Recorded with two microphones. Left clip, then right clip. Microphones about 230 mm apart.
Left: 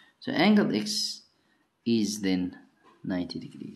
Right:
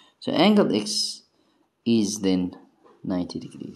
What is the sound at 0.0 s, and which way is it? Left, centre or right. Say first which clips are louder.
Speech: right 5 dB; centre.